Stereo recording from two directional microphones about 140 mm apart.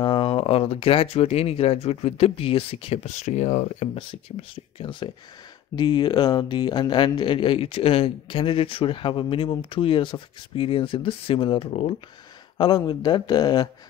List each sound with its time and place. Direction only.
0.0 s speech: 40° left (ahead or behind); by 4.0 s 55° left (ahead or behind)
4.1 s speech: 40° left (ahead or behind)